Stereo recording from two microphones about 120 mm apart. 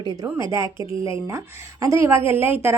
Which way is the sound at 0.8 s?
45° left (ahead or behind).